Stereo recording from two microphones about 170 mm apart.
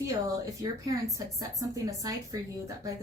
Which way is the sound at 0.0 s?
20° right (ahead or behind).